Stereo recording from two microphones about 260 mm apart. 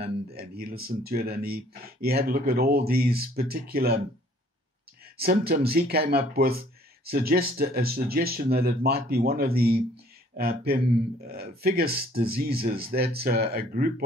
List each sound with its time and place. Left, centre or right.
0.0 s speech: right
5.1 s speech: right